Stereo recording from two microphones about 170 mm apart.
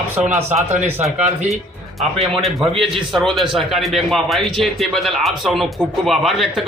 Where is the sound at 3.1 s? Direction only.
Centre (ahead or behind).